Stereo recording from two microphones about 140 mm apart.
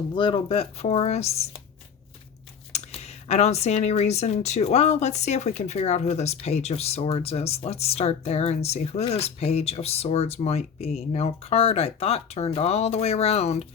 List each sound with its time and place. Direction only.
0.1 s speech: 35° left (ahead or behind)
2.7 s speech: 50° left (ahead or behind)